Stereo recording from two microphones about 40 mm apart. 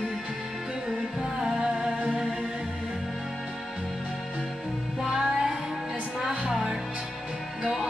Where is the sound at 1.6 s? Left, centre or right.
Centre.